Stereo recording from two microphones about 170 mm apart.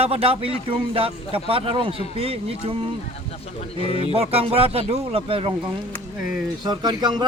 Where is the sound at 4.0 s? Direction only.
35° right (ahead or behind).